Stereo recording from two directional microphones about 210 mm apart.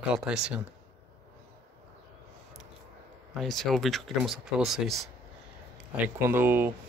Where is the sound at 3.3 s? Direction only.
Centre (ahead or behind).